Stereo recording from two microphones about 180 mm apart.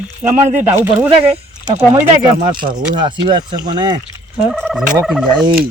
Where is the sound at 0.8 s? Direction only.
10° right (ahead or behind).